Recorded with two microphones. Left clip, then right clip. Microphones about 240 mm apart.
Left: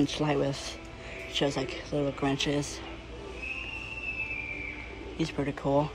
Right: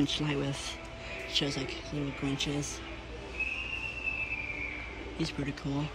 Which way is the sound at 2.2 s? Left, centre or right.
Centre.